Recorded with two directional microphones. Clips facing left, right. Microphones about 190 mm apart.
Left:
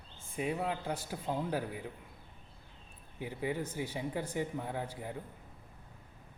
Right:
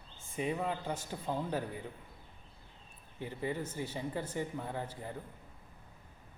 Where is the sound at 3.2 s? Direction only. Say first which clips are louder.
Left 1 dB; 10° left (ahead or behind).